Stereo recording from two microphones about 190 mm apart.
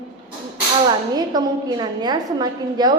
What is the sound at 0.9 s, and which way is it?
A woman's voice, 20° right (ahead or behind).